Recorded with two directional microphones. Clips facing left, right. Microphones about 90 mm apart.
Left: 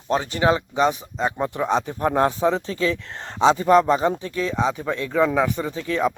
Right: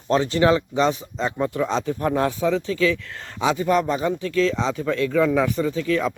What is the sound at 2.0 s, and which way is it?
Speech, 35° left (ahead or behind).